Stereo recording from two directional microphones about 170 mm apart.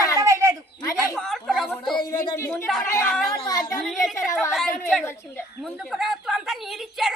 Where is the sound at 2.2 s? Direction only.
15° left (ahead or behind).